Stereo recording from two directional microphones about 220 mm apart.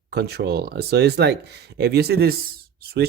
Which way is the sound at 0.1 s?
45° right (ahead or behind).